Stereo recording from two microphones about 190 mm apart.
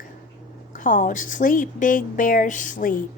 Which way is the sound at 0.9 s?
45° left (ahead or behind).